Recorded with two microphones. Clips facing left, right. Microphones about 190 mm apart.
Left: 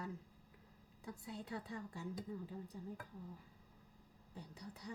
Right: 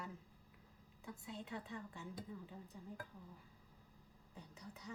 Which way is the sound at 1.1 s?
35° left (ahead or behind).